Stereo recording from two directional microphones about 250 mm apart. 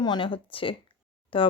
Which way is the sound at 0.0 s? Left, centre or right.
Centre.